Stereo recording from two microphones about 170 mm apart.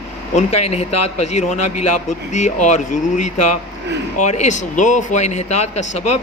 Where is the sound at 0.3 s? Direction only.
40° left (ahead or behind).